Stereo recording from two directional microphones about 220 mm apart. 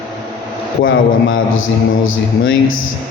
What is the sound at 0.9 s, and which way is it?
A man's voice, 65° left (ahead or behind).